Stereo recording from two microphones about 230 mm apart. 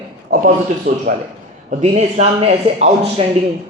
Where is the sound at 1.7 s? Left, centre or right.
Right.